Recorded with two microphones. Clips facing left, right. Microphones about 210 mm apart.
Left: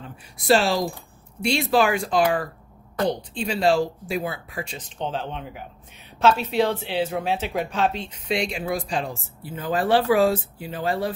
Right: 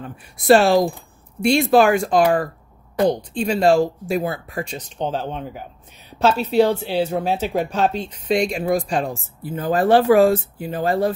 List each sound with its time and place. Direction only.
0.0 s speech: 55° right (ahead or behind)